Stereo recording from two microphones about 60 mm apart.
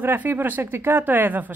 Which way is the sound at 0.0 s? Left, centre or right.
Right.